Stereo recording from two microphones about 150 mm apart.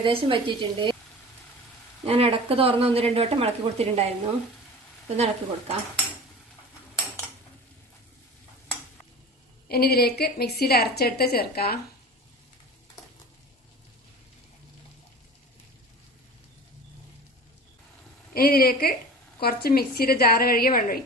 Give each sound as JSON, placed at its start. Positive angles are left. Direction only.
{"t": 0.0, "sound": "speech", "side_deg": -35}
{"t": 2.0, "sound": "speech", "side_deg": -40}
{"t": 9.6, "sound": "a woman's voice", "side_deg": 90}
{"t": 18.3, "sound": "a woman's voice", "side_deg": 80}